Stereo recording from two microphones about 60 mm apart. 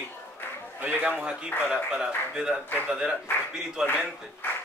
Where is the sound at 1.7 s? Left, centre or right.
Centre.